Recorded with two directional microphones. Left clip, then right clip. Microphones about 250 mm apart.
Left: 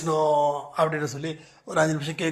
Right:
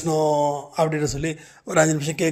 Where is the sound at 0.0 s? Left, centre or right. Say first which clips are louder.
Right 1 dB; right.